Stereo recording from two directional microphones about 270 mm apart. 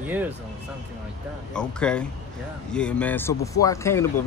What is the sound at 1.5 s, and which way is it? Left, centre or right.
Speech, centre.